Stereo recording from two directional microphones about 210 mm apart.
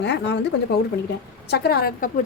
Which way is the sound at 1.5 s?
50° left (ahead or behind).